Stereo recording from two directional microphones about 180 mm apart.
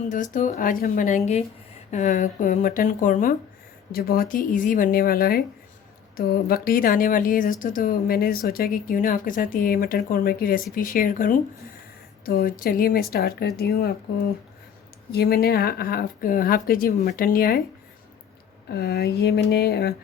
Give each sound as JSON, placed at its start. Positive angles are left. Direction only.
{"t": 0.1, "sound": "a woman's voice", "side_deg": 45}
{"t": 15.1, "sound": "speech", "side_deg": 60}
{"t": 18.7, "sound": "a woman's voice", "side_deg": 65}